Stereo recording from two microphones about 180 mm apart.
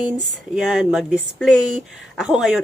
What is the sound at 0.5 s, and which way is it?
Speech, 5° right (ahead or behind).